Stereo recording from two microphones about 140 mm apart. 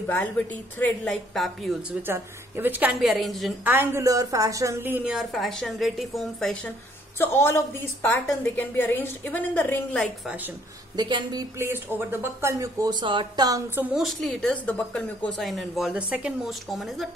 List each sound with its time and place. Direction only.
0.1 s a woman's voice: 10° left (ahead or behind)
1.3 s a woman's voice: centre (ahead or behind)
2.0 s a woman's voice: 15° right (ahead or behind); by 3.5 s centre (ahead or behind)
3.6 s speech: 15° right (ahead or behind)
5.1 s a woman's voice: centre (ahead or behind)
7.2 s a woman's voice: 20° left (ahead or behind)
11.0 s speech: 30° right (ahead or behind)
11.5 s speech: 15° right (ahead or behind); by 13.6 s 35° right (ahead or behind)
13.7 s a woman's voice: centre (ahead or behind)